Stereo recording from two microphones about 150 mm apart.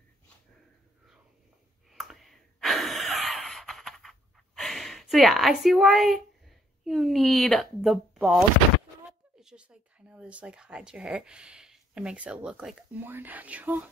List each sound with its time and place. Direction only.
1.9 s sigh: centre (ahead or behind)
6.8 s a woman's voice: centre (ahead or behind)